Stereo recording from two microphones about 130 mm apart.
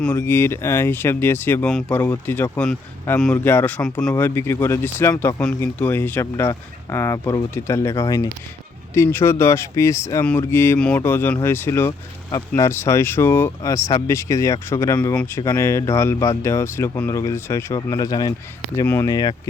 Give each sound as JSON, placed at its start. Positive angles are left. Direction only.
{"t": 0.0, "sound": "speech", "side_deg": 15}
{"t": 4.1, "sound": "speech", "side_deg": 20}
{"t": 15.1, "sound": "speech", "side_deg": 10}
{"t": 15.4, "sound": "speech", "side_deg": 20}